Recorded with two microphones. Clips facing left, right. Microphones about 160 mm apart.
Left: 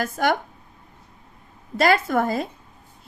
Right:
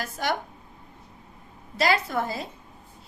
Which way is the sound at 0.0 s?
55° left (ahead or behind).